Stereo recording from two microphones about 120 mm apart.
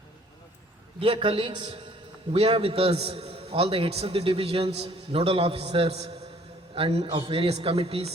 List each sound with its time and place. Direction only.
0.9 s a man's voice: 50° right (ahead or behind)